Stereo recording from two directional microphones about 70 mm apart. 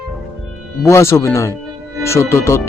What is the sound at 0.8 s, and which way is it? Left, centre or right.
A man's voice, left.